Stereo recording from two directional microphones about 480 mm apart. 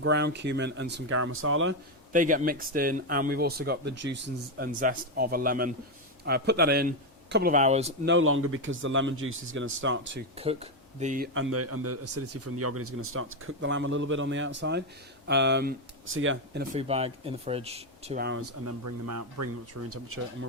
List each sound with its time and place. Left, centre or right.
0.0 s speech: right
8.1 s speech: right
10.3 s speech: centre
16.7 s speech: centre